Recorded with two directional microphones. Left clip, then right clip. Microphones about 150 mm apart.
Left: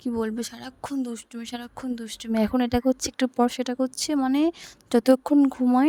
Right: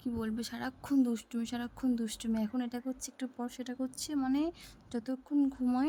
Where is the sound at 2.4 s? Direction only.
65° left (ahead or behind); by 5.3 s 80° left.